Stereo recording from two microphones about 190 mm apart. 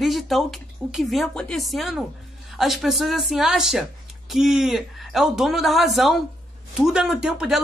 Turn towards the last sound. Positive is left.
turn(degrees=0)  # may be behind; listen again after turning